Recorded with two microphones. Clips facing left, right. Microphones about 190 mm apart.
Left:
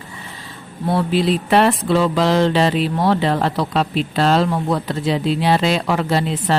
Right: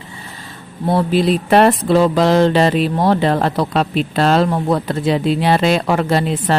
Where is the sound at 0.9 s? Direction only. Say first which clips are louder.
Right 2 dB; 45° right (ahead or behind).